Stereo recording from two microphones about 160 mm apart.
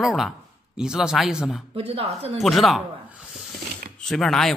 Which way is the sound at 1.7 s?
35° right (ahead or behind).